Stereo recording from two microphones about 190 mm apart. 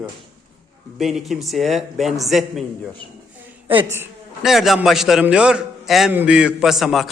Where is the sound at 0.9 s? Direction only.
Centre (ahead or behind).